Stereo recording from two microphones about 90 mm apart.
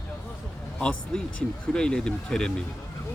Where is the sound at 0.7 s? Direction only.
10° left (ahead or behind).